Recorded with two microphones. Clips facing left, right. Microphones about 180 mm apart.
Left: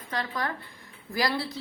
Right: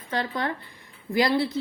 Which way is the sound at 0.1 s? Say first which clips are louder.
Right 4 dB; 30° right (ahead or behind).